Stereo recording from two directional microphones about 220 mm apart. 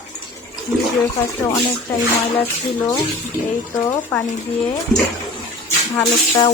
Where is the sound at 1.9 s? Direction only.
10° left (ahead or behind).